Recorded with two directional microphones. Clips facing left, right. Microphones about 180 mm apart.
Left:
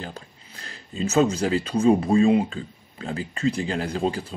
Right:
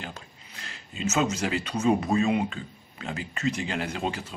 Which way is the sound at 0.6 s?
35° left (ahead or behind).